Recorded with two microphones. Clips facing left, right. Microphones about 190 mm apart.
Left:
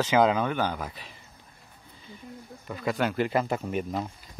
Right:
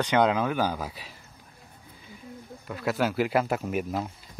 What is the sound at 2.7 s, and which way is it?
Speech, 5° right (ahead or behind).